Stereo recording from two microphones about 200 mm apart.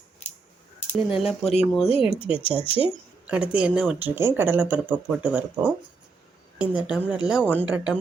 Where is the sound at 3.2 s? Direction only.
5° right (ahead or behind).